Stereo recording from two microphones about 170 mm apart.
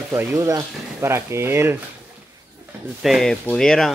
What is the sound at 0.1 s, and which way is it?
Speech, 15° right (ahead or behind).